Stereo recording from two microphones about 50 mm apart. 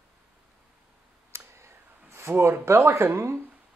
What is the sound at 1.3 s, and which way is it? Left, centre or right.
Clicking, right.